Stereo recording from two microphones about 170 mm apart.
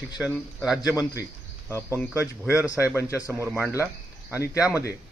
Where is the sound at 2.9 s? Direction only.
15° left (ahead or behind).